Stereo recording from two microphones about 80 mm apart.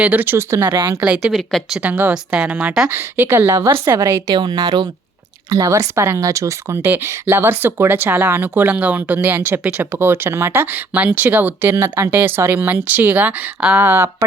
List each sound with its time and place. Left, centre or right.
0.0 s speech: right
0.9 s speech: centre
1.3 s speech: centre
1.8 s speech: right
2.9 s speech: right
4.3 s speech: right
5.5 s speech: right